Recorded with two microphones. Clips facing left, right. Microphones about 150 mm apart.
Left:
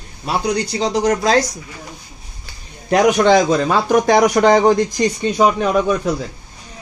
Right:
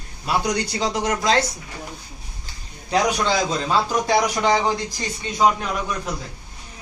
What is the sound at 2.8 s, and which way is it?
A man's voice, 65° left (ahead or behind).